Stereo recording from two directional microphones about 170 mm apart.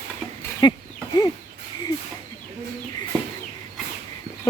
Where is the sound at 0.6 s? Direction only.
25° left (ahead or behind).